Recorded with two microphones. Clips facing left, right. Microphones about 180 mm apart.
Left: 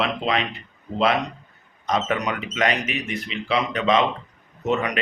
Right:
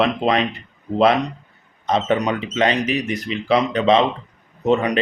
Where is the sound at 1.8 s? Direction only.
30° right (ahead or behind).